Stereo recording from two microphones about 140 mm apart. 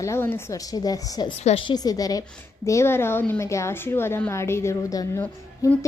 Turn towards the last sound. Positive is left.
turn(degrees=25)  # may be behind; listen again after turning